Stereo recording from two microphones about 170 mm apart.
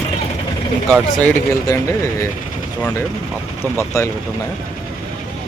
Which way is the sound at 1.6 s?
20° left (ahead or behind).